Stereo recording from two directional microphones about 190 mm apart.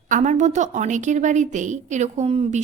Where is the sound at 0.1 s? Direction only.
40° right (ahead or behind).